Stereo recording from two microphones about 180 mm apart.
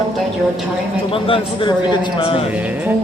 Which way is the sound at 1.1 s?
30° left (ahead or behind).